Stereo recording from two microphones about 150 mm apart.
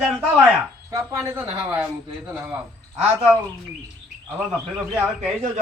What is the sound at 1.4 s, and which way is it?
Speech, 10° right (ahead or behind).